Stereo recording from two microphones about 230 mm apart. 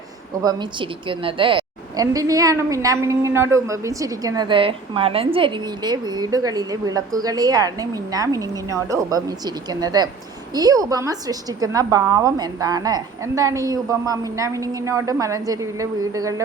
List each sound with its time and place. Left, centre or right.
0.4 s a woman's voice: centre